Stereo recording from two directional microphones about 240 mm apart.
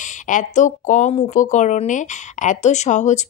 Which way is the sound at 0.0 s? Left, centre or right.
Left.